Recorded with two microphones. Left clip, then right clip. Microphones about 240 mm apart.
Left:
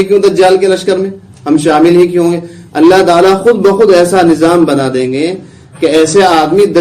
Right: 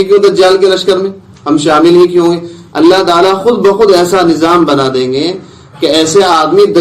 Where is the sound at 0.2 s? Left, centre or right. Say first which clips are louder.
Right 1 dB; left.